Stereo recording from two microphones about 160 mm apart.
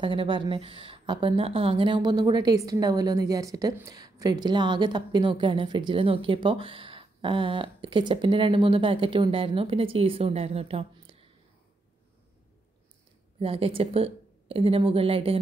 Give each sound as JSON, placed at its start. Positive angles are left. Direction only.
{"t": 0.0, "sound": "a woman's voice", "side_deg": -30}
{"t": 13.4, "sound": "a woman's voice", "side_deg": -35}